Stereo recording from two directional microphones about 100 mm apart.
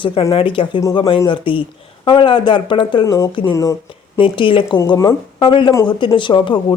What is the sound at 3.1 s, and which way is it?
Speech, 35° left (ahead or behind).